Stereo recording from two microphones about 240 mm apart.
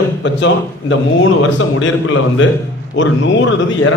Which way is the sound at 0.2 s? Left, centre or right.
Left.